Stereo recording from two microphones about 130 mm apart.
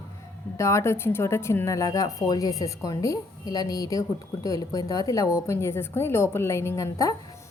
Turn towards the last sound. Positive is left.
turn(degrees=25)  # may be behind; listen again after turning